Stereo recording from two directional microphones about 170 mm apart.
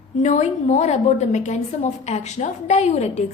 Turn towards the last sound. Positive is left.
turn(degrees=40)  # may be behind; listen again after turning